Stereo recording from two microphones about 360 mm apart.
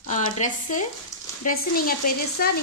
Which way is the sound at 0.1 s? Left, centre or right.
Left.